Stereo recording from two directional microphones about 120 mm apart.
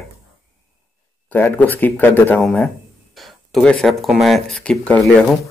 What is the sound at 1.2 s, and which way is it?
Speech, 15° left (ahead or behind).